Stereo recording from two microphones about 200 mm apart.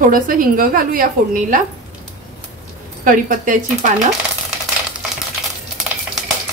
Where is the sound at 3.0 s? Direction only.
40° right (ahead or behind).